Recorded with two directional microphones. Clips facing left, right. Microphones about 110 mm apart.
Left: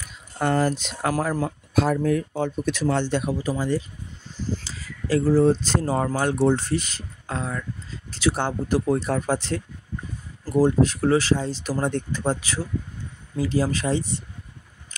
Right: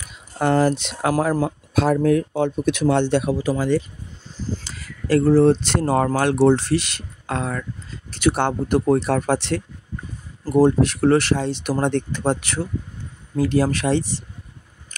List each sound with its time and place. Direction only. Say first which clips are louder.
0.4 s speech: right 4 dB; 85° right
1.1 s speech: right 5 dB; 45° right (ahead or behind)
1.7 s speech: right 2 dB; 75° right (ahead or behind)
2.0 s speech: right 5 dB; 65° right (ahead or behind); by 3.8 s 90° right
4.6 s speech: right 8 dB; 65° right (ahead or behind)